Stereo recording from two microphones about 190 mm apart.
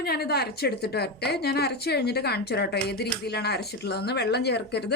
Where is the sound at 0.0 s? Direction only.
55° left (ahead or behind).